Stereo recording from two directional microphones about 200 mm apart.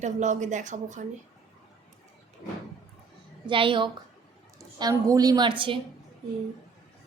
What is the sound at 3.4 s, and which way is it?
A woman's voice, 25° right (ahead or behind).